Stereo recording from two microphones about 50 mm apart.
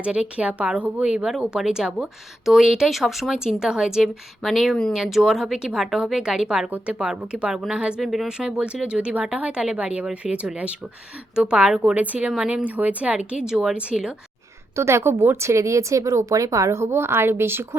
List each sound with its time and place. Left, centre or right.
0.0 s speech: right
1.3 s speech: centre
4.4 s speech: centre
8.0 s speech: centre
8.3 s a woman's voice: centre
13.5 s speech: centre
14.8 s a woman's voice: right
15.4 s a woman's voice: right